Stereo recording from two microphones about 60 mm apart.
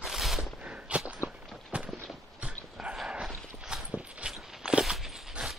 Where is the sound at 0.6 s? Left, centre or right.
Centre.